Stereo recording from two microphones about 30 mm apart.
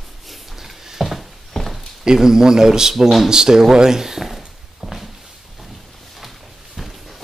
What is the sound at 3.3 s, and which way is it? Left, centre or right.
A man's voice, right.